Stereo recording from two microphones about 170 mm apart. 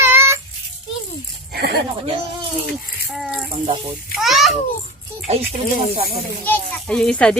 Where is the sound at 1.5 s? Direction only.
70° right (ahead or behind).